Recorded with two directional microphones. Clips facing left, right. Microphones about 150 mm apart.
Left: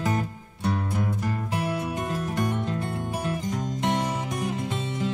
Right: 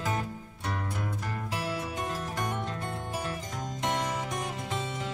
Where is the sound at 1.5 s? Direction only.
55° left (ahead or behind).